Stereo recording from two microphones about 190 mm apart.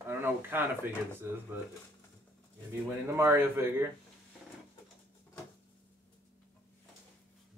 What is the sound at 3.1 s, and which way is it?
Speech, 15° right (ahead or behind).